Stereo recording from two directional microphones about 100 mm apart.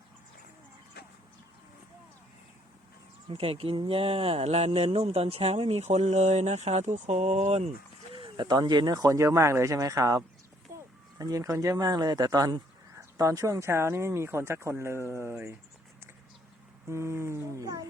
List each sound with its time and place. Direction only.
3.2 s speech: 70° right (ahead or behind); by 7.7 s 90° right
8.1 s speech: 55° right (ahead or behind); by 10.2 s 35° right (ahead or behind)
10.7 s a sound: 30° right (ahead or behind)
11.2 s speech: 35° right (ahead or behind)
16.9 s speech: 25° right (ahead or behind)